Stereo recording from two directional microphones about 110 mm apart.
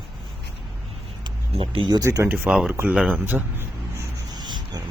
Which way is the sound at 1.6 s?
55° right (ahead or behind).